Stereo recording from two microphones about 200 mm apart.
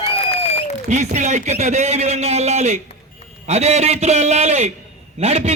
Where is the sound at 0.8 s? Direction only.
35° right (ahead or behind).